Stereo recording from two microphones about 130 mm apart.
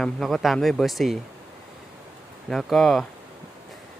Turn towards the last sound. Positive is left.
turn(degrees=0)  # may be behind; listen again after turning